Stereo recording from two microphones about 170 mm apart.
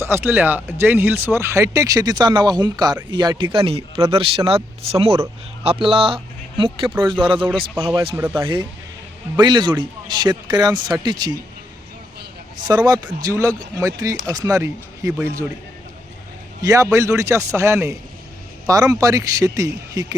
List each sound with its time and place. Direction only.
0.0 s a man's voice: 15° right (ahead or behind); by 7.9 s 30° right (ahead or behind)
8.1 s a man's voice: 15° right (ahead or behind)
8.4 s speech: 30° right (ahead or behind)
12.6 s speech: 25° right (ahead or behind)
16.6 s a man's voice: 20° right (ahead or behind)